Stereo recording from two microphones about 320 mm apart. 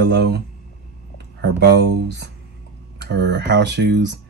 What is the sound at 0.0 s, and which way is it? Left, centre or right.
Speech, right.